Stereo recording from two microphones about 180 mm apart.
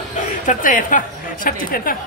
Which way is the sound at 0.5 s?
50° left (ahead or behind).